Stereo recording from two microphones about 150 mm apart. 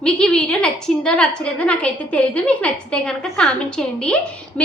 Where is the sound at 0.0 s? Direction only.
5° left (ahead or behind).